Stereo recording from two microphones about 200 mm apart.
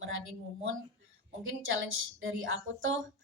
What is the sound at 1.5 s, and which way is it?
A woman's voice, 75° right (ahead or behind).